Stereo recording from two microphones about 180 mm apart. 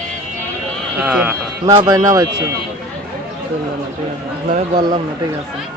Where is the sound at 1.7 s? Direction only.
20° right (ahead or behind).